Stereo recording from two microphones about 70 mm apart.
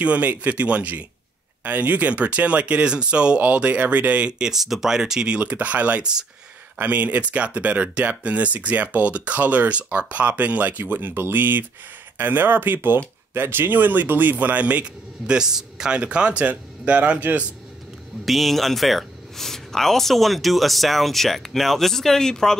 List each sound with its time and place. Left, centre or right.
0.0 s speech: right
15.3 s speech: centre
18.2 s speech: centre